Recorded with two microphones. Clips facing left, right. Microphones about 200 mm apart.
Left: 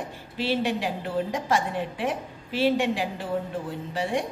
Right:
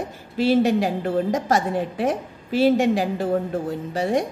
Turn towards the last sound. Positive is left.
turn(degrees=-40)  # may be behind; listen again after turning